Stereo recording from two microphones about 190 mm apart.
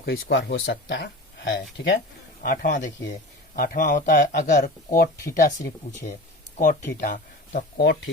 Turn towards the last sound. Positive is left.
turn(degrees=60)  # may be behind; listen again after turning